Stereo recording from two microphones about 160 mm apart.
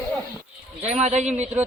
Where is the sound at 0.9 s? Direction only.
45° right (ahead or behind).